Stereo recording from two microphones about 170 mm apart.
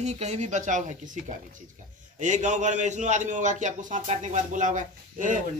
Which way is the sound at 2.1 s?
45° right (ahead or behind).